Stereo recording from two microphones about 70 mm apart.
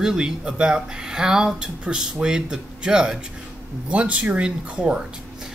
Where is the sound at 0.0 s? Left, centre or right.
Centre.